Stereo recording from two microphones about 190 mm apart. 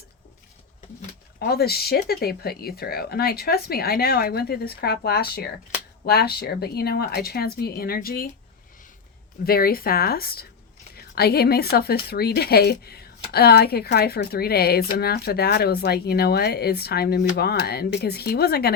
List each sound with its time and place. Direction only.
1.4 s speech: 55° left (ahead or behind)
9.4 s a woman's voice: 50° left (ahead or behind)